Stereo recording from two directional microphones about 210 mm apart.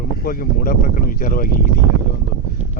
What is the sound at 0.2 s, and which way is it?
Speech, 45° left (ahead or behind).